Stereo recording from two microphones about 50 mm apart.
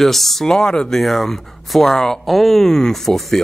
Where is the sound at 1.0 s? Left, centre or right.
Centre.